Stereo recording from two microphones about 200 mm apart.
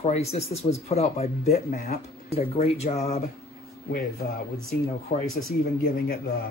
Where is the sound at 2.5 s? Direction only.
30° left (ahead or behind).